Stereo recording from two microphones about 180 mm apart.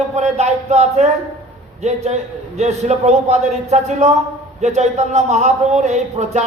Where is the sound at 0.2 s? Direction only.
40° right (ahead or behind).